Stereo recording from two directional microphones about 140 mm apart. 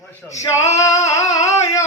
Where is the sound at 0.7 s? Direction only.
20° left (ahead or behind).